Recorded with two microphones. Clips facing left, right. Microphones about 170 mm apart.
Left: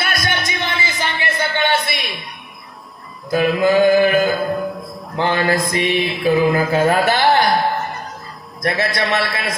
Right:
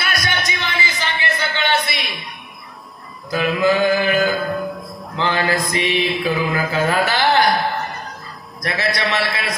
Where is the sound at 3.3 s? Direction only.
45° left (ahead or behind).